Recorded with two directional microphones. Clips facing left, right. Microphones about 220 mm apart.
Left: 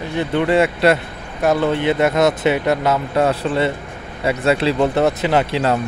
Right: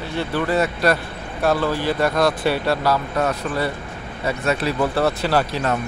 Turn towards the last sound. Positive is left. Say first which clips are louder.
# left 3 dB
turn(degrees=25)  # may be behind; listen again after turning